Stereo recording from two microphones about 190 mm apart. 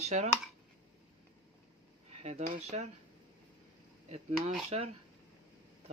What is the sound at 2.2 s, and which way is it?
Speech, 35° right (ahead or behind).